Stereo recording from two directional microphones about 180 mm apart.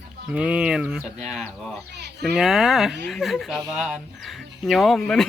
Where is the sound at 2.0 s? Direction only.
70° right (ahead or behind).